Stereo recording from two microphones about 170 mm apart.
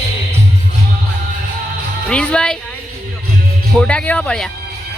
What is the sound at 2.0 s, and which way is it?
Speech, 5° left (ahead or behind).